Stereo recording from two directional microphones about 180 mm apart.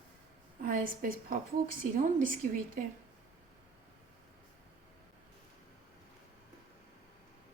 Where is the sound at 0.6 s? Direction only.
50° right (ahead or behind).